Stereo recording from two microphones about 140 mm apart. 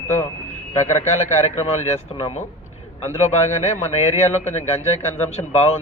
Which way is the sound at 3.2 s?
55° left (ahead or behind).